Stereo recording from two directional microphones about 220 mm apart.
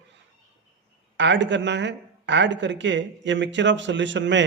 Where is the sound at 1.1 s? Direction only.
55° right (ahead or behind).